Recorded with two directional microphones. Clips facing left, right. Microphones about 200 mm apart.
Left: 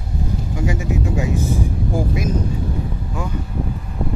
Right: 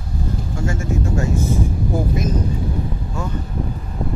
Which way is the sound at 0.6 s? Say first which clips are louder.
Left 1 dB; 15° left (ahead or behind).